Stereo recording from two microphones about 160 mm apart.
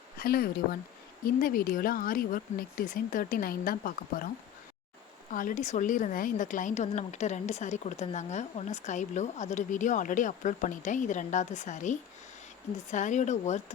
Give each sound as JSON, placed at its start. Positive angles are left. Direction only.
{"t": 0.2, "sound": "speech", "side_deg": 70}
{"t": 5.3, "sound": "a woman's voice", "side_deg": 55}